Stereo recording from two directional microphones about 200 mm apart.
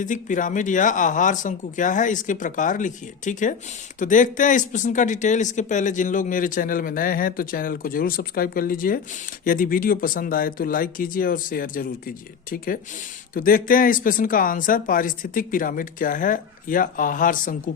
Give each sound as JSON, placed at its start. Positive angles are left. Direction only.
{"t": 0.0, "sound": "speech", "side_deg": 40}